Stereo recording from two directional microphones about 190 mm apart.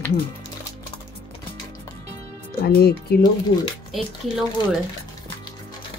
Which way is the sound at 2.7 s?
55° left (ahead or behind).